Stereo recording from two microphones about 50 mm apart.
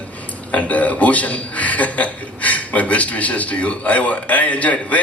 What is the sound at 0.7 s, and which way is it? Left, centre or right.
A man's voice, left.